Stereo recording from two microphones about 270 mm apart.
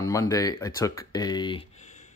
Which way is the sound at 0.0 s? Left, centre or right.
Centre.